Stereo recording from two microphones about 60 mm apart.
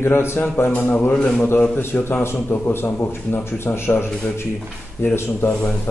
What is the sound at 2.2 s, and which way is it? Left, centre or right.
Speech, left.